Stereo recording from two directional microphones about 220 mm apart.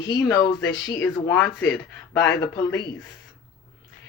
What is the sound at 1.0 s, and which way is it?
Speech, 10° left (ahead or behind).